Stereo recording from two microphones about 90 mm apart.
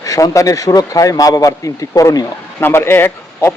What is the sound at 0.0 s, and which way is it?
Speech, 40° left (ahead or behind).